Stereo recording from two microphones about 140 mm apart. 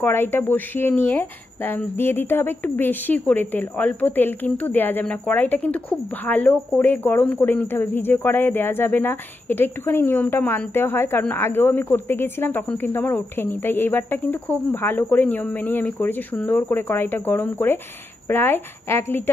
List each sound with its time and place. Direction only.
0.0 s speech: 15° left (ahead or behind)